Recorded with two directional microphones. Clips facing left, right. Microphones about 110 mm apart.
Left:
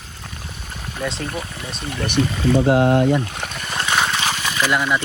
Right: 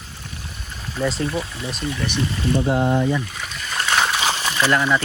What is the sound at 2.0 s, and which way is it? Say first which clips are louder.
Speech: left 6 dB; 75° left (ahead or behind).